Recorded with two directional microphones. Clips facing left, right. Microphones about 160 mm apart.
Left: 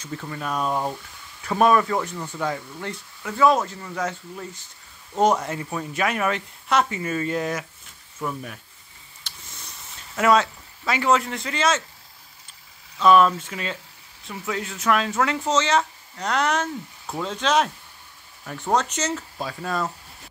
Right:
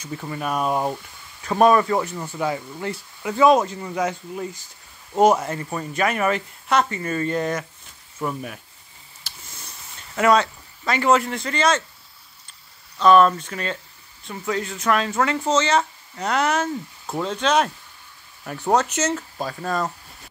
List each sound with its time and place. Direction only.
0.0 s speech: 10° right (ahead or behind)
3.2 s speech: 20° right (ahead or behind); by 7.6 s 5° left (ahead or behind)
8.2 s speech: 10° right (ahead or behind)
9.2 s a sound: centre (ahead or behind)
13.0 s speech: 5° left (ahead or behind)